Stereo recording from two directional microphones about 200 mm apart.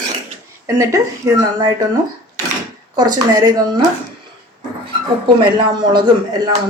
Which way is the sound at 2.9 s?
20° right (ahead or behind).